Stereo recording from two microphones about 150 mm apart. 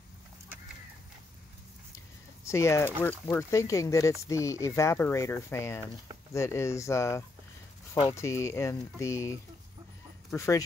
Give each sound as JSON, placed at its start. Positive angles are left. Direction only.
{"t": 2.4, "sound": "speech", "side_deg": 20}